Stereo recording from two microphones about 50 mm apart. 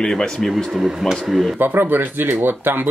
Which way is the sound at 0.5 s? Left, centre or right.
Centre.